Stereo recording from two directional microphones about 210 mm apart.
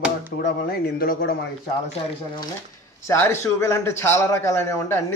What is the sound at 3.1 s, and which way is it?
A man's voice, 10° left (ahead or behind).